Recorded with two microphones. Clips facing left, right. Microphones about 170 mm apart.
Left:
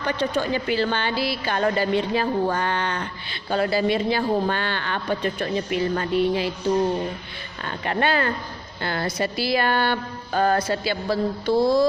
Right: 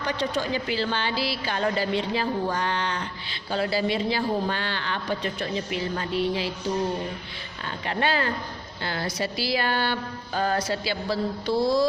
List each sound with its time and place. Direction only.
0.0 s speech: 55° left (ahead or behind)
7.6 s a woman's voice: 55° left (ahead or behind)